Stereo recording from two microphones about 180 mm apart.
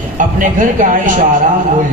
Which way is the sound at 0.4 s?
45° right (ahead or behind).